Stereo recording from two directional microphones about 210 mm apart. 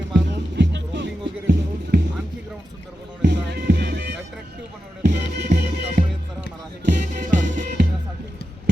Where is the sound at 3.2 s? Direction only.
50° right (ahead or behind).